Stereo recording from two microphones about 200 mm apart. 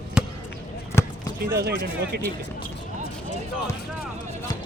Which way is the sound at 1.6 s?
50° right (ahead or behind).